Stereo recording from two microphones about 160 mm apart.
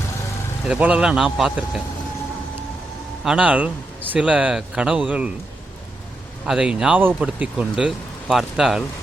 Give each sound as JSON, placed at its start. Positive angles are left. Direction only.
{"t": 0.7, "sound": "speech", "side_deg": -10}
{"t": 3.2, "sound": "speech", "side_deg": -5}
{"t": 6.4, "sound": "speech", "side_deg": -5}